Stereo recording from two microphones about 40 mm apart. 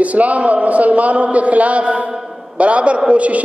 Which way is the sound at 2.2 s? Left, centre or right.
Centre.